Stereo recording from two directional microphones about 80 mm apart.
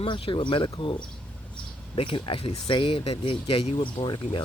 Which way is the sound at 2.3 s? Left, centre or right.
Left.